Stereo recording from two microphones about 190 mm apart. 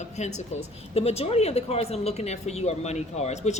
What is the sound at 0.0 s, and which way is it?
Speech, 35° left (ahead or behind).